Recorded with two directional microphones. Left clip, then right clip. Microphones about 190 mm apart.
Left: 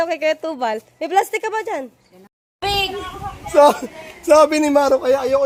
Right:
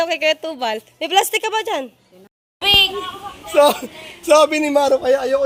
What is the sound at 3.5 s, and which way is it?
A man's voice, 30° left (ahead or behind).